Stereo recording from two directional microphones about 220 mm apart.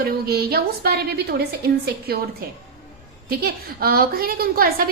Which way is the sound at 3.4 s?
45° right (ahead or behind).